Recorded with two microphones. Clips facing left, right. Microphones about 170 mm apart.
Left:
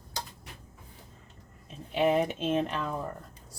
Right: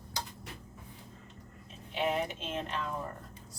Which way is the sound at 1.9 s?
55° left (ahead or behind).